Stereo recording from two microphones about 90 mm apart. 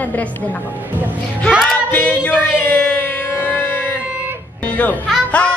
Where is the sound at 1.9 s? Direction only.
15° left (ahead or behind).